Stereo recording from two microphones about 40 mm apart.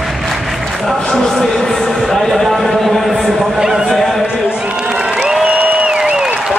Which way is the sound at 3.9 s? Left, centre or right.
Centre.